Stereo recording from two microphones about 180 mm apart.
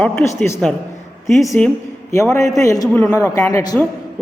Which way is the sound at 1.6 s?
5° left (ahead or behind).